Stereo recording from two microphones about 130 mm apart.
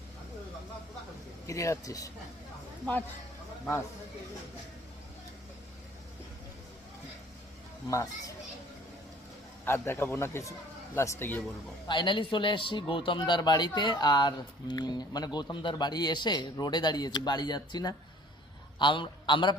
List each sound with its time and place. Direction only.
1.5 s speech: 25° left (ahead or behind)
9.6 s a man's voice: 15° left (ahead or behind)
11.9 s a man's voice: 40° left (ahead or behind)